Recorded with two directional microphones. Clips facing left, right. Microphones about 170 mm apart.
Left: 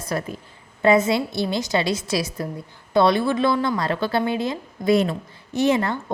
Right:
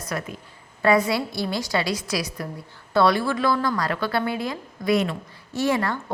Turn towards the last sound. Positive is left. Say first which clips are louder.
# left 3 dB
turn(degrees=20)  # may be behind; listen again after turning